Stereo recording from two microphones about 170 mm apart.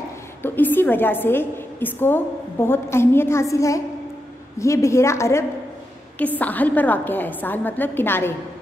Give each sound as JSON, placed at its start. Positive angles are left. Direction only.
{"t": 0.4, "sound": "a woman's voice", "side_deg": 10}